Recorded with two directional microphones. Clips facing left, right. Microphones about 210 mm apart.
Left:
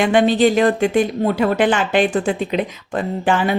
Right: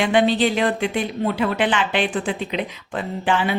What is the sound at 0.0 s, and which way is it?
Speech, 45° left (ahead or behind).